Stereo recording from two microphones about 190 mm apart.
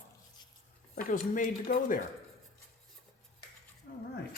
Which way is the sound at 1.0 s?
45° left (ahead or behind).